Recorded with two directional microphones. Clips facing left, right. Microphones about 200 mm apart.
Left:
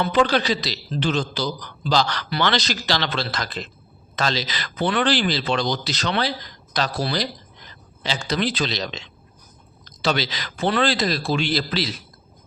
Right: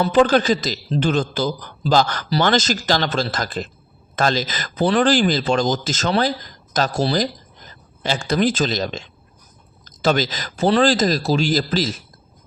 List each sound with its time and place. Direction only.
0.0 s speech: 40° right (ahead or behind)